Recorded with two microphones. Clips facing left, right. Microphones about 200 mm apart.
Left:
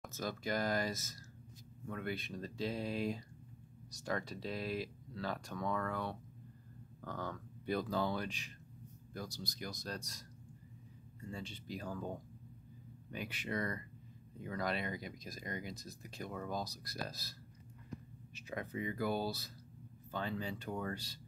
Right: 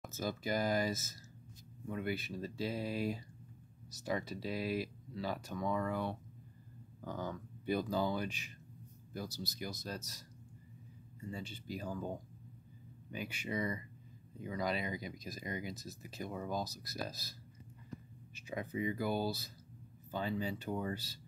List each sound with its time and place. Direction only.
0.0 s speech: centre (ahead or behind)
13.1 s speech: centre (ahead or behind)
18.7 s speech: 15° right (ahead or behind)
18.9 s speech: centre (ahead or behind)